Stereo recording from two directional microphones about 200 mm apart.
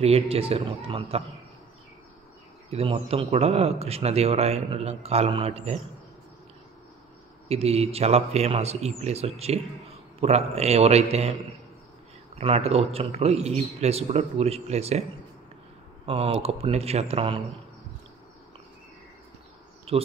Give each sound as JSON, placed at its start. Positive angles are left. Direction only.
{"t": 0.0, "sound": "a man's voice", "side_deg": -30}
{"t": 2.7, "sound": "speech", "side_deg": -30}
{"t": 7.4, "sound": "speech", "side_deg": -30}
{"t": 12.4, "sound": "speech", "side_deg": -30}
{"t": 16.1, "sound": "speech", "side_deg": -30}
{"t": 19.9, "sound": "speech", "side_deg": -30}